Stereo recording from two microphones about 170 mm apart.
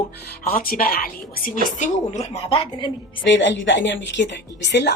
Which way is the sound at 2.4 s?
30° left (ahead or behind).